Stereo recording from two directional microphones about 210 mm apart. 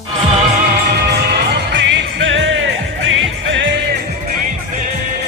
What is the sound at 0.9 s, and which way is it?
Music, 50° right (ahead or behind).